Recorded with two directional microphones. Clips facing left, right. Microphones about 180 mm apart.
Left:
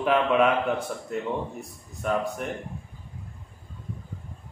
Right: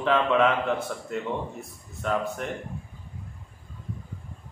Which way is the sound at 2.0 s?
10° left (ahead or behind).